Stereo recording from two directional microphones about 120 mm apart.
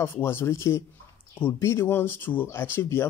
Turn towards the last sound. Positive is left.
turn(degrees=20)  # may be behind; listen again after turning